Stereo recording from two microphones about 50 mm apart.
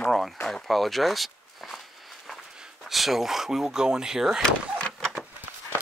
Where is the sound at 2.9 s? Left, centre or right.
Centre.